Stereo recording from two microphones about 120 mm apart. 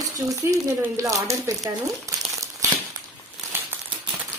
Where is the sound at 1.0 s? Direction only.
25° right (ahead or behind).